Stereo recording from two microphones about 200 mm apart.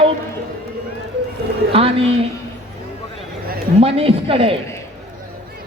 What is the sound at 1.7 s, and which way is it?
Speech, 30° right (ahead or behind).